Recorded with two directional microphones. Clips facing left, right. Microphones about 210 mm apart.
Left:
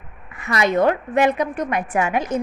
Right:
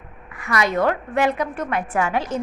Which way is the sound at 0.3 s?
25° left (ahead or behind).